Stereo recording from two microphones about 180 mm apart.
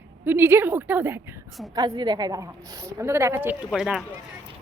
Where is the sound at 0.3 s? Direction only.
10° right (ahead or behind).